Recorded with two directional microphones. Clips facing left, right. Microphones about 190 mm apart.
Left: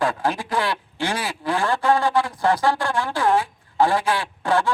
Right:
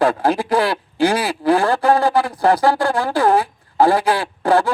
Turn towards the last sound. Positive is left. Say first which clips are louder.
# right 5 dB
turn(degrees=-35)  # may be behind; listen again after turning